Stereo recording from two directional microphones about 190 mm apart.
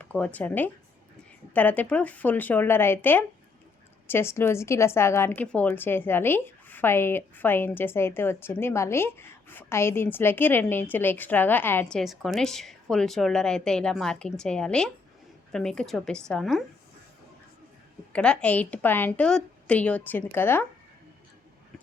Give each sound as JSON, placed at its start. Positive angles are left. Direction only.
{"t": 0.0, "sound": "a woman's voice", "side_deg": 5}
{"t": 18.1, "sound": "a woman's voice", "side_deg": 5}